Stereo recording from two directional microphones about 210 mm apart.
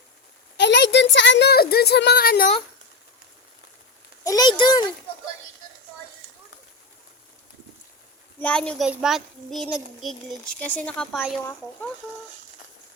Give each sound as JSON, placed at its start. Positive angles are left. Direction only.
{"t": 0.5, "sound": "a sound", "side_deg": 55}
{"t": 1.1, "sound": "speech", "side_deg": 60}
{"t": 4.2, "sound": "a child's voice", "side_deg": 20}
{"t": 8.4, "sound": "speech", "side_deg": 5}